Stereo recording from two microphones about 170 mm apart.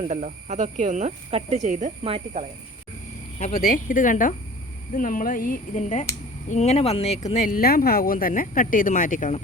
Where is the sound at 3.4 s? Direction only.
55° left (ahead or behind).